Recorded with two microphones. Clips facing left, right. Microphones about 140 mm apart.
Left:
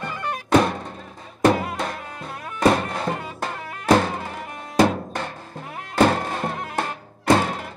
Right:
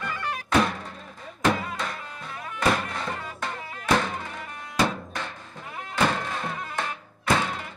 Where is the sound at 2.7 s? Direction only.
40° left (ahead or behind).